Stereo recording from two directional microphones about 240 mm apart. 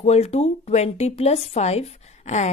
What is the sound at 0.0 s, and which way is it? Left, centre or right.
A woman's voice, left.